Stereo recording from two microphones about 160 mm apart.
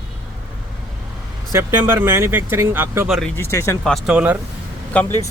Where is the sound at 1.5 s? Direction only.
15° right (ahead or behind).